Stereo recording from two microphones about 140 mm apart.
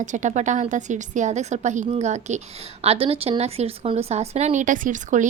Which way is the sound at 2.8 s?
45° right (ahead or behind).